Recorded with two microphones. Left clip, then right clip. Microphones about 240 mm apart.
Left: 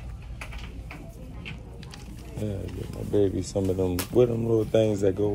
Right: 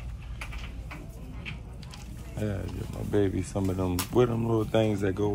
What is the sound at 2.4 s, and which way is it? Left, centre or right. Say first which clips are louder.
Speech: even; centre.